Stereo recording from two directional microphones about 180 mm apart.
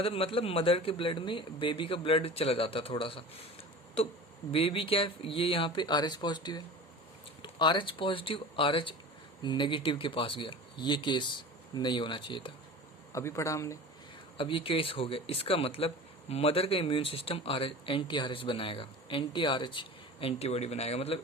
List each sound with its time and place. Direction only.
0.0 s speech: 30° left (ahead or behind)
4.5 s speech: 30° left (ahead or behind)
13.1 s speech: 15° left (ahead or behind)
14.3 s speech: 30° left (ahead or behind)